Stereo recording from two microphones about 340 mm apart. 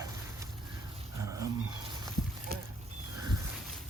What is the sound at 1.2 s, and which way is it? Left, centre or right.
Dog, centre.